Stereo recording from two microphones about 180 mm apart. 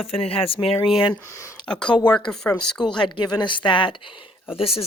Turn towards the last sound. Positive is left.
turn(degrees=30)  # may be behind; listen again after turning